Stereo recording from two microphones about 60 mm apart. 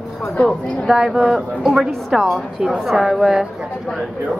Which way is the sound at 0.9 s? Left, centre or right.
Centre.